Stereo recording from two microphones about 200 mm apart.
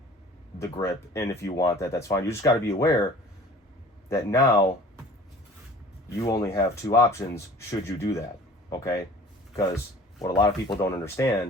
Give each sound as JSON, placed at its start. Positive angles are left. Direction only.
{"t": 0.6, "sound": "speech", "side_deg": 15}
{"t": 4.1, "sound": "speech", "side_deg": 15}
{"t": 6.1, "sound": "speech", "side_deg": 15}
{"t": 10.2, "sound": "speech", "side_deg": 20}